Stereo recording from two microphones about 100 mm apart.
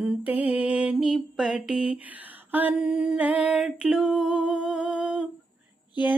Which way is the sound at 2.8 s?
5° right (ahead or behind).